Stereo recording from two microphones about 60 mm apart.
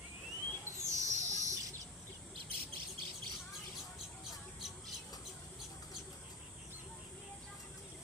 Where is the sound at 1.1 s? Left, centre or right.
Right.